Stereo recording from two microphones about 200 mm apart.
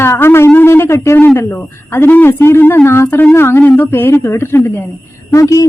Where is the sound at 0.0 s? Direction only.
10° left (ahead or behind).